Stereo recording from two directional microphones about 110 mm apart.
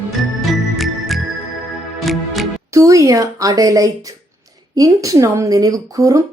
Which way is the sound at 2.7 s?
30° right (ahead or behind).